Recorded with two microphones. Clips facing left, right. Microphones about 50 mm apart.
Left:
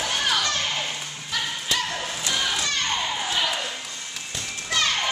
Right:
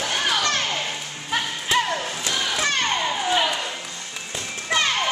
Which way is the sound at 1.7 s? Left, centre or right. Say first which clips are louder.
Right 6 dB; centre.